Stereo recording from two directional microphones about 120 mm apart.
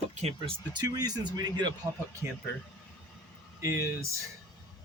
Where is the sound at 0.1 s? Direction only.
65° right (ahead or behind).